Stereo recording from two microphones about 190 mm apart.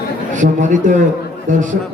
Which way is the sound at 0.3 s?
40° right (ahead or behind).